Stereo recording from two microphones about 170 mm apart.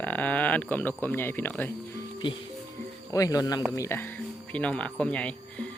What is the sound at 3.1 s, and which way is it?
Speech, 20° left (ahead or behind).